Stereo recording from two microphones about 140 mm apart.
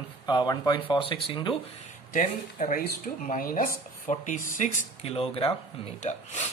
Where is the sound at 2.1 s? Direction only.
70° left (ahead or behind).